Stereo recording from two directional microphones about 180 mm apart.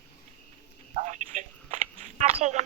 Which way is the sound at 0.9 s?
40° right (ahead or behind).